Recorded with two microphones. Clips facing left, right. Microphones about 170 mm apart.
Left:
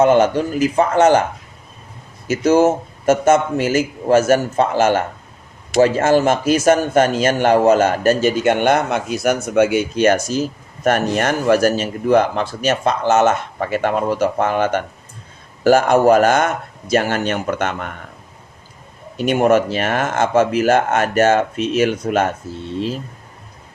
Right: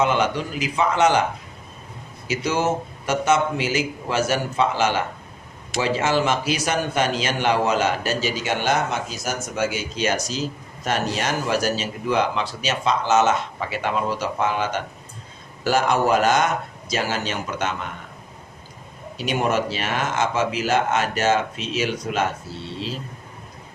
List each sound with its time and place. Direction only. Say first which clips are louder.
0.0 s a man's voice: left 8 dB; 50° left (ahead or behind)
2.2 s a man's voice: left 9 dB; 50° left (ahead or behind)
19.1 s a man's voice: left 8 dB; 55° left (ahead or behind)